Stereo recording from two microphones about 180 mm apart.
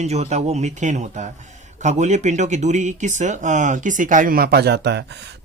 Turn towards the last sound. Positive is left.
turn(degrees=-70)  # may be behind; listen again after turning